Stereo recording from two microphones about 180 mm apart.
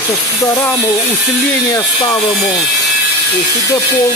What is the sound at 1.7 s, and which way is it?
Speech, 20° left (ahead or behind).